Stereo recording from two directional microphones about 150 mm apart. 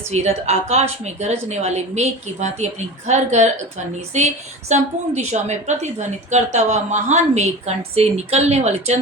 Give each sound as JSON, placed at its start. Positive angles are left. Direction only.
{"t": 0.1, "sound": "a woman's voice", "side_deg": -45}
{"t": 4.7, "sound": "a woman's voice", "side_deg": -50}